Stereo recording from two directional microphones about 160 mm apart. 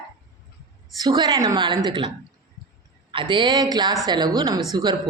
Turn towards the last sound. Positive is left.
turn(degrees=-25)  # may be behind; listen again after turning